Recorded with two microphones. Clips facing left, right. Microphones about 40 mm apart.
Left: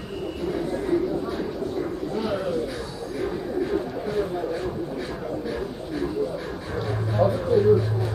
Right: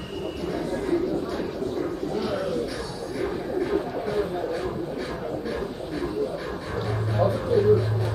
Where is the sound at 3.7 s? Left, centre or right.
Centre.